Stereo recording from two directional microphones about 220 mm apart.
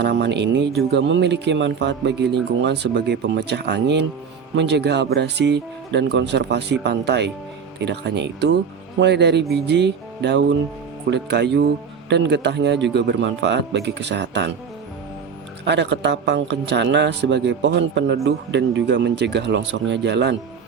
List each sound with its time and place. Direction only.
0.0 s speech: 50° right (ahead or behind)
15.6 s speech: 50° right (ahead or behind)